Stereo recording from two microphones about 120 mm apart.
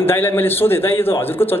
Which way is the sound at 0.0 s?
20° left (ahead or behind).